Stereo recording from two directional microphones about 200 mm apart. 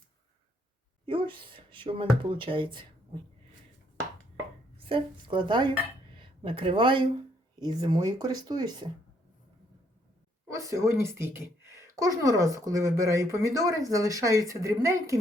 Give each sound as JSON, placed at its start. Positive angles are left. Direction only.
{"t": 1.0, "sound": "speech", "side_deg": -25}
{"t": 4.8, "sound": "speech", "side_deg": -25}
{"t": 10.5, "sound": "speech", "side_deg": -15}